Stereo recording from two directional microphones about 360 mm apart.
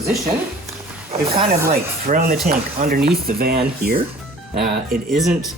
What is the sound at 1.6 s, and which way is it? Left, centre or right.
Speech, right.